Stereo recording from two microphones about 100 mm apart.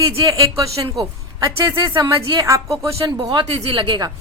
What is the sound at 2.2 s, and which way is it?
Speech, 50° right (ahead or behind).